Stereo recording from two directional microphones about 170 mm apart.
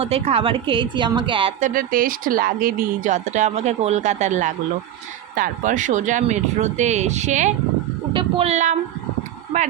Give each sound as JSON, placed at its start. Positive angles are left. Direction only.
{"t": 0.0, "sound": "a woman's voice", "side_deg": -35}
{"t": 1.6, "sound": "a woman's voice", "side_deg": -55}